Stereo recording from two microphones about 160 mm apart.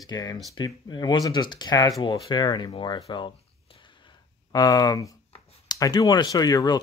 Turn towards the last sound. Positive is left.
turn(degrees=25)  # may be behind; listen again after turning